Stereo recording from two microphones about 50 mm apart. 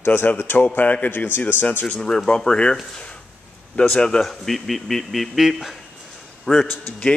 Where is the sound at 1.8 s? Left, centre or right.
Centre.